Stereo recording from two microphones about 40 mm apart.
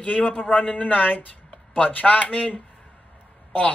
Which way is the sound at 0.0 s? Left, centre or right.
Left.